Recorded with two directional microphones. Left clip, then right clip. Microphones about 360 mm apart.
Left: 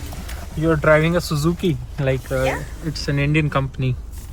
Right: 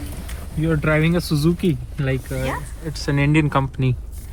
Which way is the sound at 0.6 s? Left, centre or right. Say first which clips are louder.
Left 5 dB; left.